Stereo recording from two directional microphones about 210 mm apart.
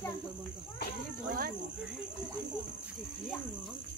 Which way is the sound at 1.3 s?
45° right (ahead or behind).